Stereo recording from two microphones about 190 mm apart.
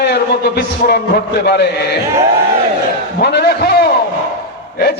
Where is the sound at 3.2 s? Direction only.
60° left (ahead or behind).